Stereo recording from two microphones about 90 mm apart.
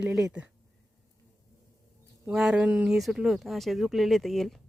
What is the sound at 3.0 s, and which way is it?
Speech, centre (ahead or behind).